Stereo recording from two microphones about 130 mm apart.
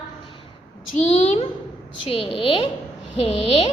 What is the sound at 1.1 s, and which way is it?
Speech, 55° left (ahead or behind).